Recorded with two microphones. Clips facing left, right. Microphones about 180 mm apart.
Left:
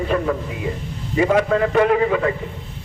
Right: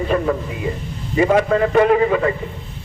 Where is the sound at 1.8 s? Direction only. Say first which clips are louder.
Right 3 dB; 40° right (ahead or behind).